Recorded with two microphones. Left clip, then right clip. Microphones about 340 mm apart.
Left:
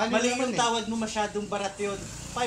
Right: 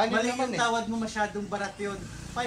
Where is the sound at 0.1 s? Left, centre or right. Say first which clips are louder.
Left 1 dB; centre.